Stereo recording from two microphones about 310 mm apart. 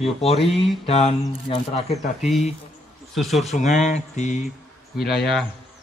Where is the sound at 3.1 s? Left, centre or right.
Centre.